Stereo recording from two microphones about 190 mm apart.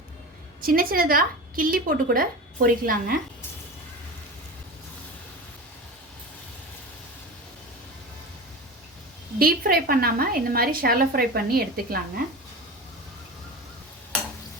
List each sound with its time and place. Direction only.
0.6 s a woman's voice: 50° right (ahead or behind)
9.4 s a woman's voice: 50° right (ahead or behind)